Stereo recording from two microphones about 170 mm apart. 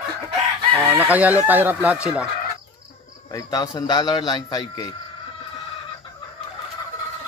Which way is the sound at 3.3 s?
20° left (ahead or behind).